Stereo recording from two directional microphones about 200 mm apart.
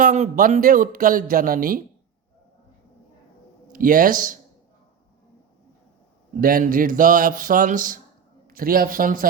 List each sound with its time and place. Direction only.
0.0 s speech: 40° right (ahead or behind)
3.7 s speech: 45° right (ahead or behind)
6.4 s speech: 45° right (ahead or behind)